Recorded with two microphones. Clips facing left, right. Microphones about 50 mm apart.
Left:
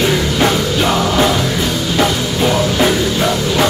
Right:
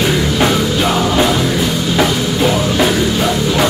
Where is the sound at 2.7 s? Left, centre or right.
Centre.